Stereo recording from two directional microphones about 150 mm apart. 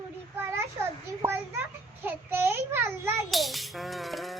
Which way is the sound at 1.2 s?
15° right (ahead or behind).